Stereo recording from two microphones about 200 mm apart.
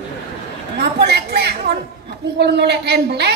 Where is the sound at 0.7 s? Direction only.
55° right (ahead or behind).